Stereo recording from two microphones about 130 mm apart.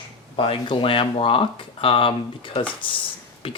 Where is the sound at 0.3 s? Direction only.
45° left (ahead or behind).